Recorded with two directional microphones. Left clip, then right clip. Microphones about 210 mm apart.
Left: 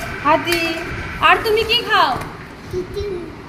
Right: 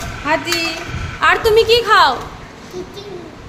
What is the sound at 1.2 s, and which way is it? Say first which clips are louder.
Speech: right 2 dB; 30° right (ahead or behind).